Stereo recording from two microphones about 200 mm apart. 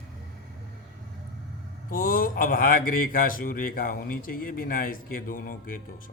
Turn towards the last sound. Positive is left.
turn(degrees=45)  # may be behind; listen again after turning